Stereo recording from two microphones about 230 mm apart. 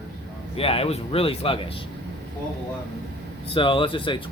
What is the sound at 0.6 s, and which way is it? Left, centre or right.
A man's voice, left.